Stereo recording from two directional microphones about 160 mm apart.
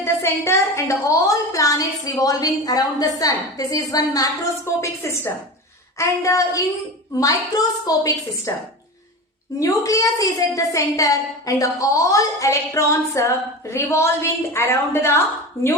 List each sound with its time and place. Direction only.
0.0 s a woman's voice: 15° left (ahead or behind)
9.6 s a woman's voice: 20° left (ahead or behind)